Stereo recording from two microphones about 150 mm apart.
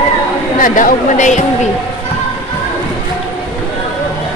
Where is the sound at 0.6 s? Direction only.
65° left (ahead or behind).